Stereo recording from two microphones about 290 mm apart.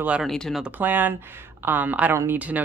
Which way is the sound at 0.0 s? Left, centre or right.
Centre.